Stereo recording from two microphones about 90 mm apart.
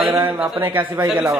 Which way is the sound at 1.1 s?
10° right (ahead or behind).